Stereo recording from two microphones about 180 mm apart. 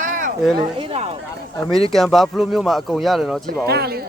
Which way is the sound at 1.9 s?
Centre (ahead or behind).